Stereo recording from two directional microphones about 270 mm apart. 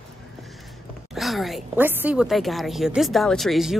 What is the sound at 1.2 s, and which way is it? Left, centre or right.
A woman's voice, centre.